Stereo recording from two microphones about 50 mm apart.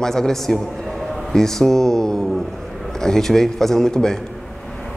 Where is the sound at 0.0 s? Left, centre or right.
Centre.